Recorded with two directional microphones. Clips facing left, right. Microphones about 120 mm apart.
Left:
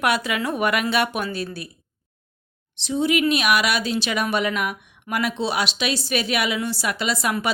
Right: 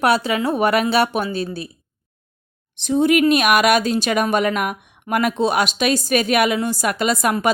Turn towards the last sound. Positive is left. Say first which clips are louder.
# right 5 dB
turn(degrees=-50)  # may be behind; listen again after turning